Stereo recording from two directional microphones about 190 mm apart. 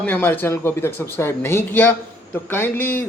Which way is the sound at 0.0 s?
10° left (ahead or behind).